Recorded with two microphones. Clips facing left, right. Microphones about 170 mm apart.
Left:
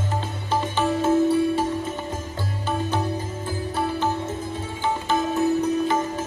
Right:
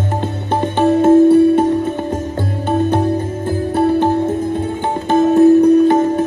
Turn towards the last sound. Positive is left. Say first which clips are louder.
# right 11 dB
turn(degrees=-55)  # may be behind; listen again after turning